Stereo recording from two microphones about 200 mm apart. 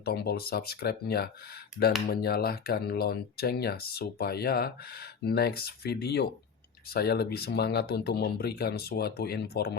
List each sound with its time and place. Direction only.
0.0 s speech: 50° left (ahead or behind)